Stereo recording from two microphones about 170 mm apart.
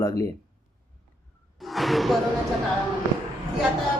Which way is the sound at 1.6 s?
Centre (ahead or behind).